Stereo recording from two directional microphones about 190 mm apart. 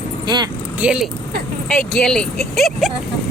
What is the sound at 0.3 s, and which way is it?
Speech, 20° right (ahead or behind).